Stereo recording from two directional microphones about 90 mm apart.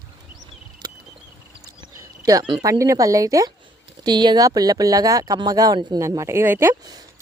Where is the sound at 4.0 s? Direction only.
55° right (ahead or behind).